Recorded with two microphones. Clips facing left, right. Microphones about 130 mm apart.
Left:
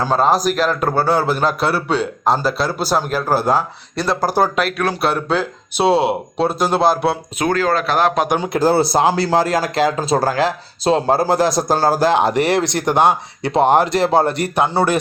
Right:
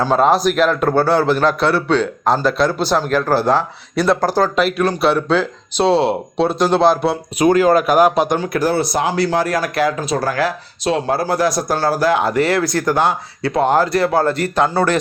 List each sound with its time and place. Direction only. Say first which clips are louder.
0.0 s a man's voice: right 2 dB; centre (ahead or behind)
3.9 s speech: right 4 dB; centre (ahead or behind)
4.3 s a man's voice: even; 15° left (ahead or behind)
4.5 s speech: right 3 dB; centre (ahead or behind)
7.3 s speech: right 8 dB; 10° right (ahead or behind)
8.4 s speech: left 2 dB; 25° left (ahead or behind)